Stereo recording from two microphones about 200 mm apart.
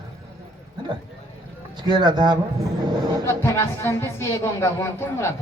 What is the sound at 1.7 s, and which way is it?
A man's voice, 20° right (ahead or behind).